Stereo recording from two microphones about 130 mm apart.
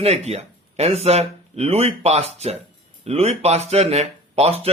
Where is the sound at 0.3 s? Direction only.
55° right (ahead or behind).